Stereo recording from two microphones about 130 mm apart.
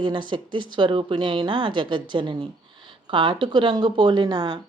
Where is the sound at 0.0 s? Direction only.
35° right (ahead or behind).